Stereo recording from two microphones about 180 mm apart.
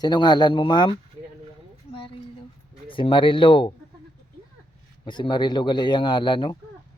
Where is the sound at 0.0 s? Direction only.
25° left (ahead or behind).